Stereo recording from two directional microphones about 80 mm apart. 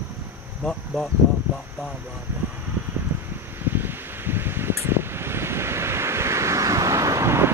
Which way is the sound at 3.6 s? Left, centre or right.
Right.